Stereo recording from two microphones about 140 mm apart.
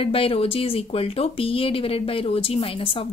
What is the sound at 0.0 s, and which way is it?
A woman's voice, 40° left (ahead or behind).